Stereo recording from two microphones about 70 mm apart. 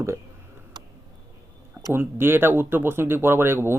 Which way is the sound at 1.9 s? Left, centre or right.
Right.